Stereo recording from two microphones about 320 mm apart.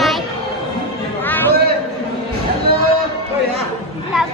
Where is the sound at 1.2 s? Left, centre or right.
Centre.